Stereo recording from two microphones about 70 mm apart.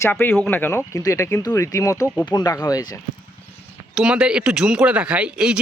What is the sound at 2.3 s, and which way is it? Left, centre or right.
Speech, left.